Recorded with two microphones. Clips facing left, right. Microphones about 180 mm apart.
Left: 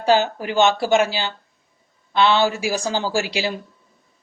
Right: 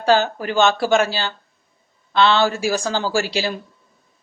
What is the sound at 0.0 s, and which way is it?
Speech, 15° left (ahead or behind).